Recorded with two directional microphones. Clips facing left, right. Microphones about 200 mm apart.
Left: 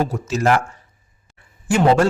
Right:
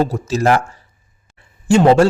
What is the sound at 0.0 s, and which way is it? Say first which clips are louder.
Speech: right 3 dB; 35° right (ahead or behind).